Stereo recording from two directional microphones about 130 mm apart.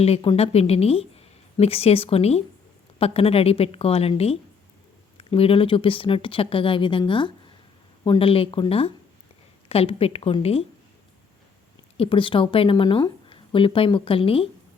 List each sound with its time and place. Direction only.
0.2 s speech: 45° left (ahead or behind)
11.9 s speech: 40° left (ahead or behind)